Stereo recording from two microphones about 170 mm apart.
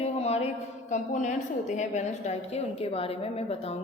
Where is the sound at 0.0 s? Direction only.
40° left (ahead or behind).